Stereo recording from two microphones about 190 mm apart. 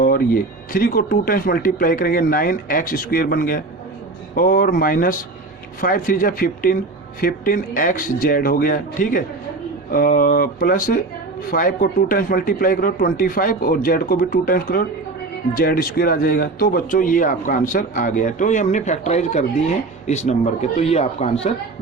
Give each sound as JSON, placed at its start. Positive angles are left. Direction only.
{"t": 0.0, "sound": "speech", "side_deg": 50}